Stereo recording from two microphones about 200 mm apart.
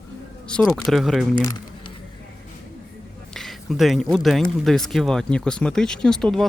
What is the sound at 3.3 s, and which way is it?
Speech, centre (ahead or behind).